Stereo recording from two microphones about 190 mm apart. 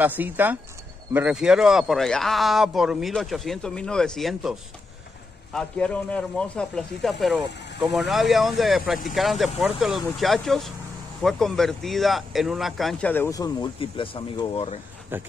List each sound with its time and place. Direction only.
0.0 s speech: 10° right (ahead or behind)
13.1 s speech: 15° left (ahead or behind)